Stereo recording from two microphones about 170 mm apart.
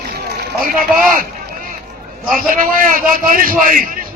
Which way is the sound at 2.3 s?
55° right (ahead or behind).